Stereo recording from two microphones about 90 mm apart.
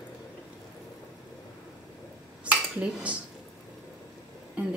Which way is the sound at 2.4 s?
15° right (ahead or behind).